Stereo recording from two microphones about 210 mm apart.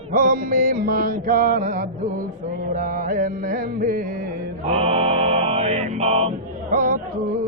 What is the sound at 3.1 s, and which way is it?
Music, 45° right (ahead or behind).